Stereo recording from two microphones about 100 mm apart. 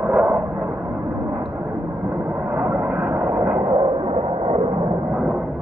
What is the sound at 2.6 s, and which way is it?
Vehicle, 15° right (ahead or behind).